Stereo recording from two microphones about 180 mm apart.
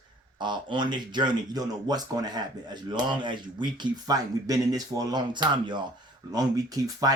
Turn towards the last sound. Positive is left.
turn(degrees=-20)  # may be behind; listen again after turning